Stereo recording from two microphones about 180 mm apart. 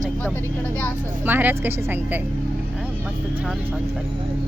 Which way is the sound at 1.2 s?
10° right (ahead or behind).